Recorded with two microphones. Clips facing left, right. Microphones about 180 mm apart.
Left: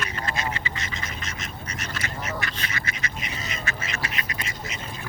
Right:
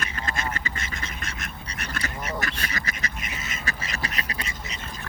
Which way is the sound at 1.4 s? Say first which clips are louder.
Left 1 dB; 60° right (ahead or behind).